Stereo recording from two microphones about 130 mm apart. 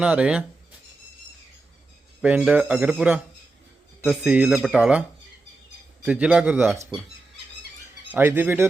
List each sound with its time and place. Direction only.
0.0 s speech: 10° right (ahead or behind)
2.2 s speech: 10° right (ahead or behind)
8.1 s speech: 15° right (ahead or behind)